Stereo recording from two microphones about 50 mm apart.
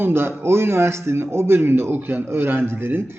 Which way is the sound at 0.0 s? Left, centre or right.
Right.